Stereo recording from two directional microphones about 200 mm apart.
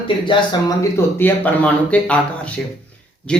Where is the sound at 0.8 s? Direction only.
10° left (ahead or behind).